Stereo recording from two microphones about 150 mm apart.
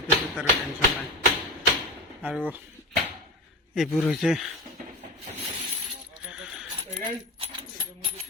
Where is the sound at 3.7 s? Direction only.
Centre (ahead or behind).